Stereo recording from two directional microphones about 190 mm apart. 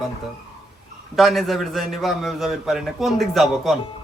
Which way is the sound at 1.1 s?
Centre (ahead or behind).